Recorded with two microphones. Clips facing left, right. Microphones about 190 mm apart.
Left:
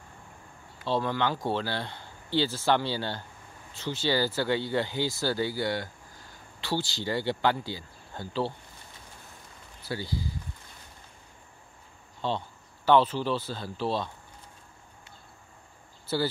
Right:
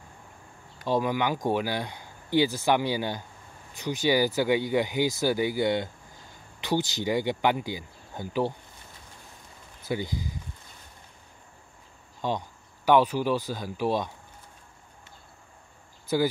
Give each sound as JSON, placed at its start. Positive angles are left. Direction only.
{"t": 0.8, "sound": "speech", "side_deg": -15}
{"t": 9.8, "sound": "speech", "side_deg": -20}
{"t": 12.2, "sound": "speech", "side_deg": -15}